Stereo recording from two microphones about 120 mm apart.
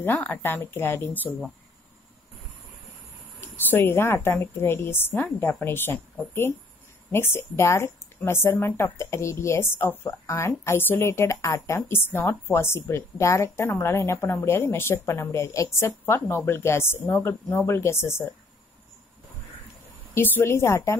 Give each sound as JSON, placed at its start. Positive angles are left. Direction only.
{"t": 0.0, "sound": "speech", "side_deg": 15}
{"t": 3.3, "sound": "a woman's voice", "side_deg": 15}
{"t": 20.2, "sound": "a woman's voice", "side_deg": 20}